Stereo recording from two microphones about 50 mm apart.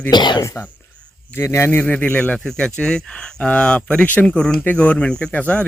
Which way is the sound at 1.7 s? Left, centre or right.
Left.